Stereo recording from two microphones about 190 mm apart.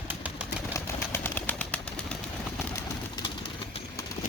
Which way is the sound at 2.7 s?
15° left (ahead or behind).